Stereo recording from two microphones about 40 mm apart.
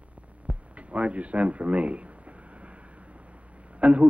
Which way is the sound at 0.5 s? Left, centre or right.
Right.